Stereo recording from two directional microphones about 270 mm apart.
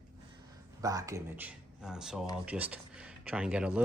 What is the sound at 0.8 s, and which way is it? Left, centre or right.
Speech, centre.